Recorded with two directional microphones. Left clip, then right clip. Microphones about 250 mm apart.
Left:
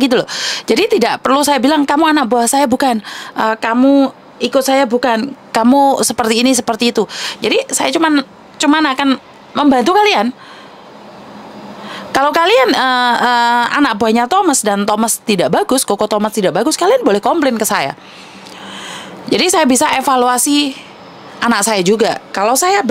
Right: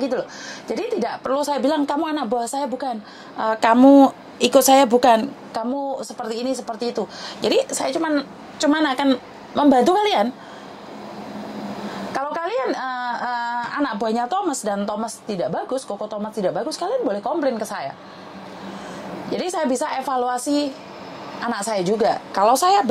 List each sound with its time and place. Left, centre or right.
0.0 s speech: left
3.5 s speech: centre
5.5 s speech: left
7.4 s a woman's voice: left
7.7 s speech: left
12.1 s speech: left
15.5 s speech: left
19.3 s speech: left